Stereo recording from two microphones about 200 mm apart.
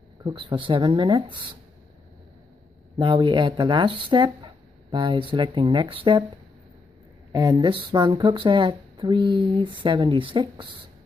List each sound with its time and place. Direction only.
0.2 s speech: 20° right (ahead or behind)
3.0 s speech: 25° right (ahead or behind)
7.3 s speech: 20° right (ahead or behind)